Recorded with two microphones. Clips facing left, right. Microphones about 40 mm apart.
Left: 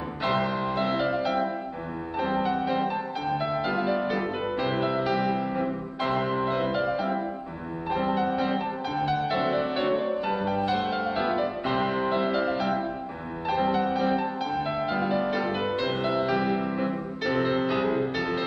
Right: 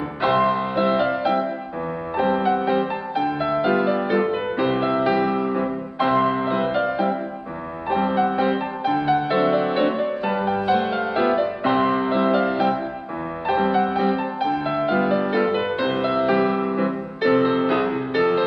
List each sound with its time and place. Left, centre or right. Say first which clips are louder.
0.2 s music: right 7 dB; centre